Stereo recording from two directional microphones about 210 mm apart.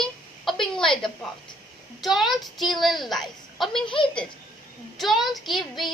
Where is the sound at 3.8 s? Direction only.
25° left (ahead or behind).